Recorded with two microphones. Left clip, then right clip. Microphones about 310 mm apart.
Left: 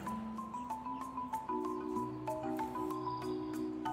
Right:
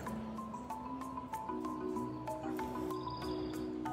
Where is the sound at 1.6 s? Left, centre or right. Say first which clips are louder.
Left 1 dB; centre.